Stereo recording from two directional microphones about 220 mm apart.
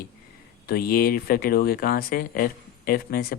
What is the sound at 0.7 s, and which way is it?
Speech, 40° left (ahead or behind).